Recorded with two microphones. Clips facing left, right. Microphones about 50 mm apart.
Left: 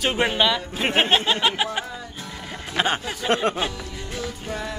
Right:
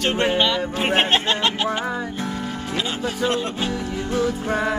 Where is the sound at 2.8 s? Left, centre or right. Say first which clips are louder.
Left 1 dB; left.